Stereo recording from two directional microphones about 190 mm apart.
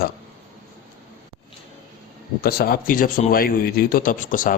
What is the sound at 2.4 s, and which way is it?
Speech, 55° left (ahead or behind).